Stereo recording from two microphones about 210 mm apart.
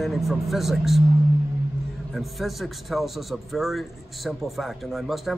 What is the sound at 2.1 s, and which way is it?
Speech, centre (ahead or behind).